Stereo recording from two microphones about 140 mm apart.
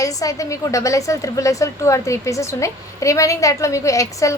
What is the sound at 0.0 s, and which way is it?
A woman's voice, 25° left (ahead or behind).